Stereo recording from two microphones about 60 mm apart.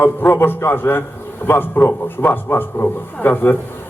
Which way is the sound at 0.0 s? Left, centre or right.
Left.